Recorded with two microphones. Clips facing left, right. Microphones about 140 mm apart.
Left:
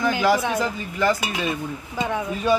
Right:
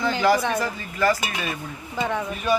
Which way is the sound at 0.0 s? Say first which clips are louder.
Even; 10° left (ahead or behind).